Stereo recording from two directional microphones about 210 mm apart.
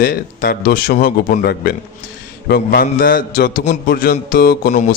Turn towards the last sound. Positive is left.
turn(degrees=45)  # may be behind; listen again after turning